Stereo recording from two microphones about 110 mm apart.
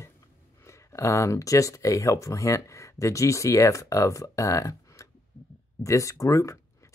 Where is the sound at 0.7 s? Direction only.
25° left (ahead or behind).